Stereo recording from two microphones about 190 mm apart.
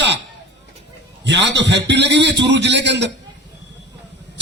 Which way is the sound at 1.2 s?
65° right (ahead or behind).